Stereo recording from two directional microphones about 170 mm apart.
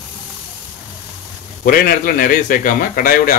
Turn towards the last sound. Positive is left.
turn(degrees=55)  # may be behind; listen again after turning